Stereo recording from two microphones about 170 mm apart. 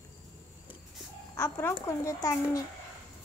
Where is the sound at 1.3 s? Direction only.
15° left (ahead or behind).